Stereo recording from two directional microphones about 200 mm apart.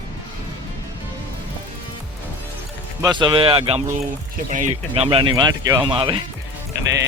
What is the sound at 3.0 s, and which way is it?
Speech, 20° right (ahead or behind).